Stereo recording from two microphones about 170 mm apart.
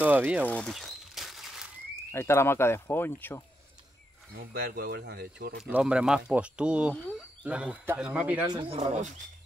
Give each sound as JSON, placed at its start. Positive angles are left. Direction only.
{"t": 0.0, "sound": "a man's voice", "side_deg": -10}
{"t": 0.5, "sound": "a sound", "side_deg": 5}
{"t": 2.1, "sound": "speech", "side_deg": 15}
{"t": 4.3, "sound": "speech", "side_deg": -65}
{"t": 5.6, "sound": "a man's voice", "side_deg": -5}
{"t": 8.7, "sound": "speech", "side_deg": -45}